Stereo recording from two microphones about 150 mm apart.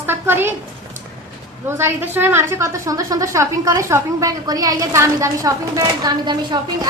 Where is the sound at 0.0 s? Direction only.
15° right (ahead or behind).